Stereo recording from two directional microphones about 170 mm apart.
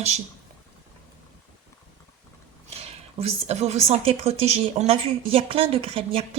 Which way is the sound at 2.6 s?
35° right (ahead or behind).